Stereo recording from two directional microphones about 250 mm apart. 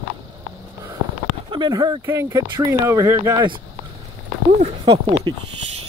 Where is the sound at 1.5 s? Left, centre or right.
Centre.